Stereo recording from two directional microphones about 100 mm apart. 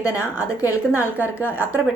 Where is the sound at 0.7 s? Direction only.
15° right (ahead or behind).